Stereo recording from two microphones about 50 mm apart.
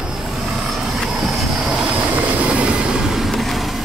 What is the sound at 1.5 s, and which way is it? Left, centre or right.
Vehicle, centre.